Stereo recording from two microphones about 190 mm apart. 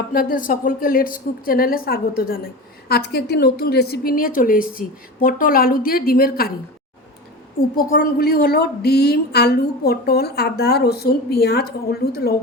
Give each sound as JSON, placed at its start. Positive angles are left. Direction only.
{"t": 0.1, "sound": "a woman's voice", "side_deg": 50}
{"t": 7.8, "sound": "a woman's voice", "side_deg": 50}